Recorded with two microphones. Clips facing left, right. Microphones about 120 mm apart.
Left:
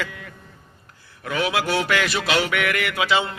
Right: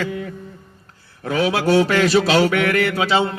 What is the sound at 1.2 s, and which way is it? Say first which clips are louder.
Mantra: right 5 dB; 35° right (ahead or behind).